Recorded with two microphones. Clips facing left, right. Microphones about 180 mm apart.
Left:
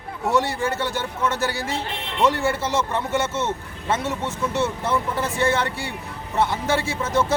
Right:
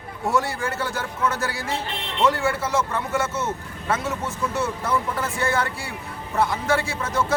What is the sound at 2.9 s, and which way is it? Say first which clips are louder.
Speech: left 2 dB; 20° left (ahead or behind).